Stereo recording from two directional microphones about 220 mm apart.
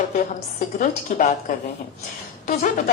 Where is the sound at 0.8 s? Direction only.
35° left (ahead or behind).